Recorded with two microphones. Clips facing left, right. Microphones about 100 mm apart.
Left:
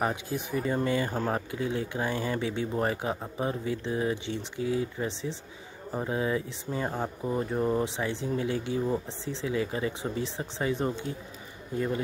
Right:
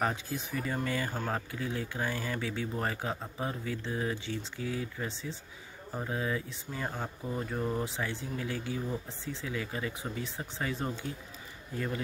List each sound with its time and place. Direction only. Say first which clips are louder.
0.0 s speech: left 3 dB; 20° left (ahead or behind)